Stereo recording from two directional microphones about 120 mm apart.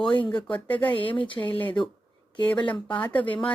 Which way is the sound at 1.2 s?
40° left (ahead or behind).